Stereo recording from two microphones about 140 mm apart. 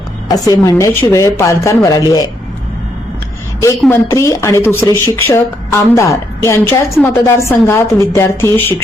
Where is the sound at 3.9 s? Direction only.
20° left (ahead or behind).